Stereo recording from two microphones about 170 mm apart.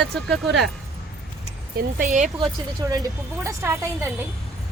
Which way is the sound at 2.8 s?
20° right (ahead or behind).